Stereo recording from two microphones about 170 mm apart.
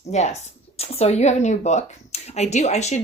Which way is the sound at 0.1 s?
40° left (ahead or behind).